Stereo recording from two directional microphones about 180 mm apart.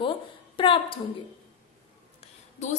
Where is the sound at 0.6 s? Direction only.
30° left (ahead or behind).